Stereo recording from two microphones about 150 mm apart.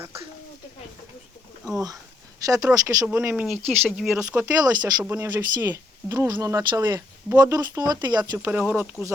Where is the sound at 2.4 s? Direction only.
20° right (ahead or behind).